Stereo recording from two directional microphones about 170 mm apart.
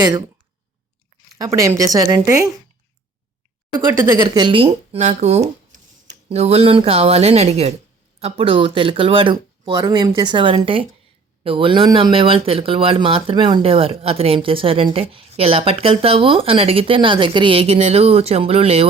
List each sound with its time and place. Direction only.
0.0 s speech: 25° right (ahead or behind)
1.4 s a woman's voice: 20° right (ahead or behind)
4.2 s speech: 30° right (ahead or behind)